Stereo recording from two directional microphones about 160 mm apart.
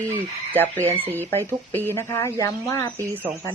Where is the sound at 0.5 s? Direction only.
10° left (ahead or behind).